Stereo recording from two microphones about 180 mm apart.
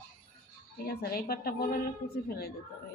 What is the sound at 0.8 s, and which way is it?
A man's voice, 60° left (ahead or behind).